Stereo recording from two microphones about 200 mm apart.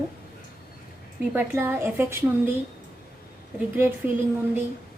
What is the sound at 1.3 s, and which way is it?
A woman's voice, 10° right (ahead or behind).